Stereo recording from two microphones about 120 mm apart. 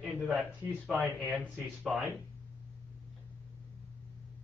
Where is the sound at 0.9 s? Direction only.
15° right (ahead or behind).